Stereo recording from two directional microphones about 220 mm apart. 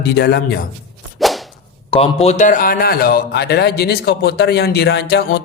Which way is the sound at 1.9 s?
25° left (ahead or behind).